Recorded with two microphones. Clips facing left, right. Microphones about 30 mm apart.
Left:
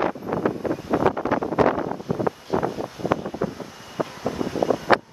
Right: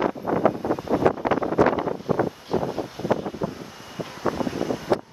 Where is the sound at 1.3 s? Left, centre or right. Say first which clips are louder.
Right 1 dB; right.